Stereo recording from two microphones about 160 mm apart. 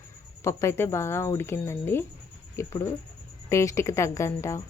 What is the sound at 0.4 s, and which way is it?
Speech, 15° left (ahead or behind).